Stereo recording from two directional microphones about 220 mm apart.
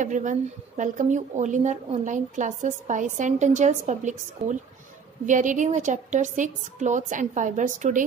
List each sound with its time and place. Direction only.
0.0 s speech: 35° right (ahead or behind)